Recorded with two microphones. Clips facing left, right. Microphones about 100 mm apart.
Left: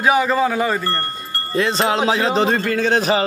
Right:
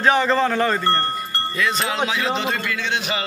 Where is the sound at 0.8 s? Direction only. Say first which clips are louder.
Right 3 dB; 20° right (ahead or behind).